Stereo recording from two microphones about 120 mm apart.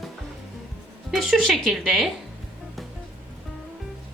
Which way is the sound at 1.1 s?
Centre (ahead or behind).